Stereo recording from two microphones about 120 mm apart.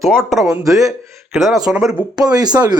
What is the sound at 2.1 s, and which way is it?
Speech, 35° right (ahead or behind).